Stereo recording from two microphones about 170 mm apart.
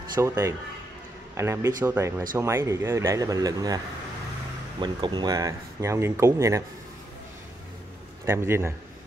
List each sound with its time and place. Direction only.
0.2 s speech: 15° right (ahead or behind)
8.3 s speech: 15° right (ahead or behind)